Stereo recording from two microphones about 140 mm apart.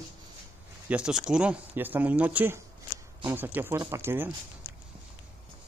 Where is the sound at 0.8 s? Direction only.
10° right (ahead or behind).